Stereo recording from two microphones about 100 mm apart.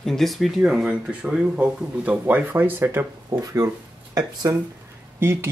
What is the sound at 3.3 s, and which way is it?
Speech, 35° right (ahead or behind).